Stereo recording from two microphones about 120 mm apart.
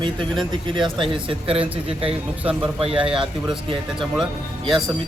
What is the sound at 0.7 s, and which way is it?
Speech, 45° right (ahead or behind).